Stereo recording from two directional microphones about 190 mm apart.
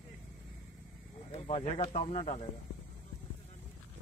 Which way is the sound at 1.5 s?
35° left (ahead or behind).